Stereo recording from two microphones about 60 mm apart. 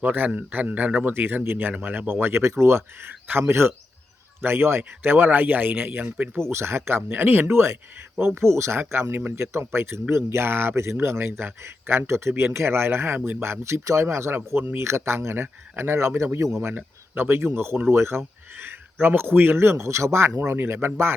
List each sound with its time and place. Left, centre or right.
0.0 s a man's voice: right
2.4 s speech: right
6.3 s speech: right
13.1 s speech: right
13.4 s speech: right
16.6 s speech: right
19.1 s speech: right